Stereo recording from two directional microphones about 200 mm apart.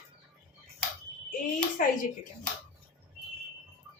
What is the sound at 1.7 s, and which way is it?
Speech, 45° left (ahead or behind).